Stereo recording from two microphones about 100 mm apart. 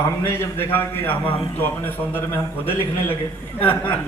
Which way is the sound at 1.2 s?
60° left (ahead or behind).